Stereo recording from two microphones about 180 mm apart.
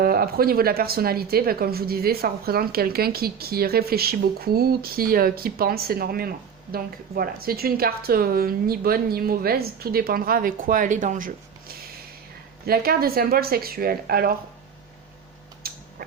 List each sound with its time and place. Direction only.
0.0 s speech: 55° right (ahead or behind)
12.6 s speech: 55° right (ahead or behind)
15.6 s a sound: 55° right (ahead or behind)